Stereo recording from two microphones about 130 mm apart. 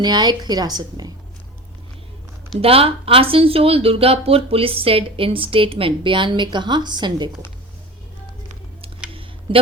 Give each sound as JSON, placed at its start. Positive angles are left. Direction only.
{"t": 0.0, "sound": "a woman's voice", "side_deg": -30}
{"t": 2.6, "sound": "speech", "side_deg": -45}